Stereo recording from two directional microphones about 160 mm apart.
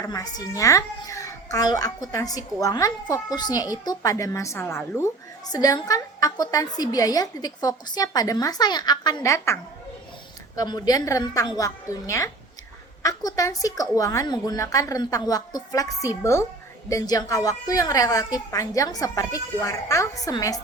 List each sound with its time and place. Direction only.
0.0 s a child's voice: 20° left (ahead or behind)
10.6 s a child's voice: 25° left (ahead or behind)